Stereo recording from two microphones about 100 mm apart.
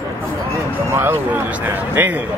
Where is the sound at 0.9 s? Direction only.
25° right (ahead or behind).